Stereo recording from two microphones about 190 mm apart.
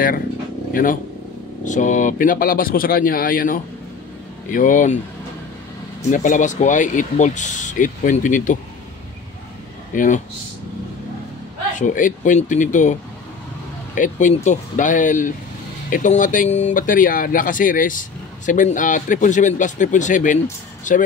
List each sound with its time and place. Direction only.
1.6 s speech: 40° left (ahead or behind)
6.0 s speech: 40° left (ahead or behind)
9.9 s speech: 40° left (ahead or behind)
11.8 s speech: 45° left (ahead or behind)
13.9 s speech: 40° left (ahead or behind)